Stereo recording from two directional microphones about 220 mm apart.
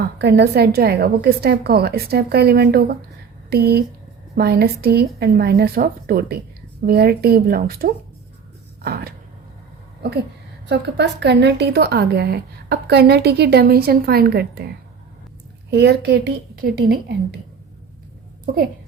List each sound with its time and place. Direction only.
0.2 s a woman's voice: 50° right (ahead or behind)
8.8 s a sound: 45° right (ahead or behind)
10.7 s a woman's voice: 50° right (ahead or behind)
15.7 s a woman's voice: 50° right (ahead or behind)